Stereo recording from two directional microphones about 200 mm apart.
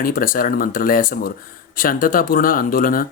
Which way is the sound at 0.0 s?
45° left (ahead or behind).